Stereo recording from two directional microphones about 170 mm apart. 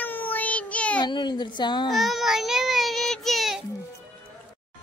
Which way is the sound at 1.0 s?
25° left (ahead or behind).